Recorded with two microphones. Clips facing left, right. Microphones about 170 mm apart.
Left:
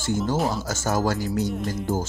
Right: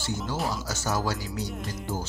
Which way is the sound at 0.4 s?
50° left (ahead or behind).